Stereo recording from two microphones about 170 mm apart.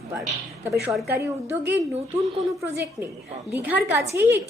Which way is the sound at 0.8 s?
Centre (ahead or behind).